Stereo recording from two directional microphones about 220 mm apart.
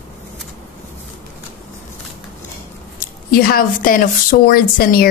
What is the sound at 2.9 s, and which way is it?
Speech, 45° left (ahead or behind).